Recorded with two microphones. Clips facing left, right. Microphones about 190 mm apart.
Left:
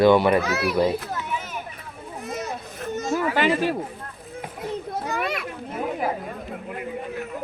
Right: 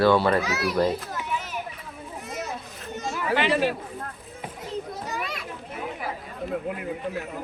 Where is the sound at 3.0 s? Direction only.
45° left (ahead or behind).